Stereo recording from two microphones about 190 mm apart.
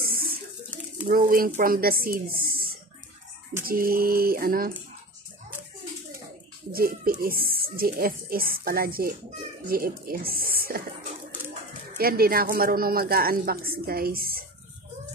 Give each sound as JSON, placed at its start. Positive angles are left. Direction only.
{"t": 0.0, "sound": "a sound", "side_deg": -50}
{"t": 1.0, "sound": "speech", "side_deg": -50}
{"t": 3.6, "sound": "speech", "side_deg": -50}
{"t": 6.7, "sound": "speech", "side_deg": -50}
{"t": 12.0, "sound": "speech", "side_deg": -50}